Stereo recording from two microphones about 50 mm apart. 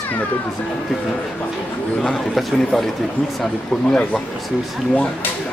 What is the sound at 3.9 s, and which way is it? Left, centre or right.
Speech, centre.